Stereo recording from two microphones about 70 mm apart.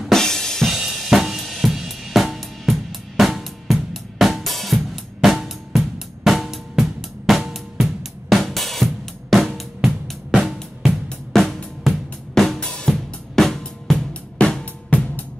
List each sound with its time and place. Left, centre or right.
0.0 s drum: centre
0.9 s cymbal: centre
9.6 s music: centre
14.6 s drum: left